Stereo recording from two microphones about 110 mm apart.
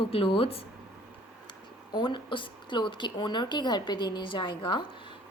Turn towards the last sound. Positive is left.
turn(degrees=45)  # may be behind; listen again after turning